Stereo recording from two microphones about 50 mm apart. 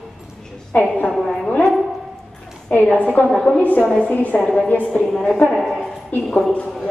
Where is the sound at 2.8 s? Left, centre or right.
Left.